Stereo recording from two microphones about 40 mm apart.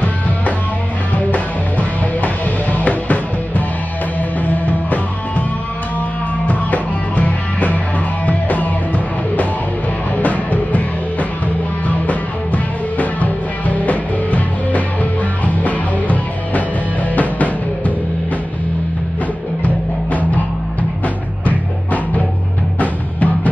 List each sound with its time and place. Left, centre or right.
1.1 s music: left
6.4 s music: left
12.9 s music: left
19.6 s music: left
21.5 s music: left